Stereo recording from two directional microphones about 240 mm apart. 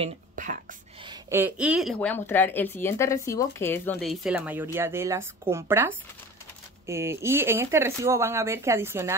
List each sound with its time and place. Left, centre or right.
0.0 s speech: right
1.0 s speech: centre